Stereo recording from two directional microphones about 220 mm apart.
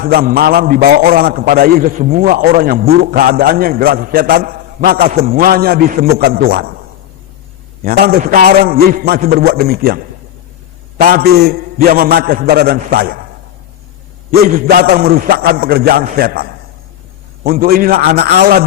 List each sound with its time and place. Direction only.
0.0 s a man's voice: 45° right (ahead or behind)
7.9 s a man's voice: 45° right (ahead or behind)
14.3 s a man's voice: 45° right (ahead or behind)